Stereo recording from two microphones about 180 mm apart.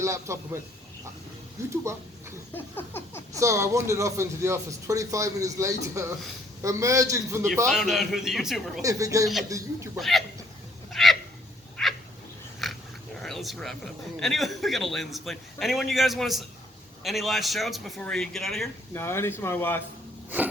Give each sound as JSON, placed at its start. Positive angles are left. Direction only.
{"t": 0.0, "sound": "speech", "side_deg": -15}
{"t": 1.7, "sound": "speech", "side_deg": -15}
{"t": 2.6, "sound": "speech", "side_deg": 10}
{"t": 3.3, "sound": "speech", "side_deg": -15}
{"t": 7.7, "sound": "a man's voice", "side_deg": 0}
{"t": 8.8, "sound": "speech", "side_deg": -20}
{"t": 10.0, "sound": "a man's voice", "side_deg": 0}
{"t": 10.9, "sound": "a sound", "side_deg": 0}
{"t": 12.6, "sound": "biting", "side_deg": 0}
{"t": 13.2, "sound": "a man's voice", "side_deg": 0}
{"t": 18.9, "sound": "speech", "side_deg": 15}